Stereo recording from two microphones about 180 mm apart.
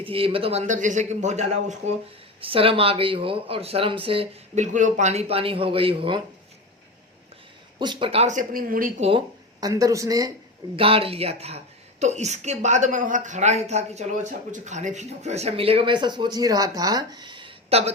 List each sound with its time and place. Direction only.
0.0 s a woman's voice: 30° right (ahead or behind)
2.4 s a woman's voice: 30° right (ahead or behind)
7.8 s a woman's voice: 25° right (ahead or behind); by 9.0 s 50° right (ahead or behind)
9.0 s speech: 25° right (ahead or behind)
10.8 s a woman's voice: 30° right (ahead or behind)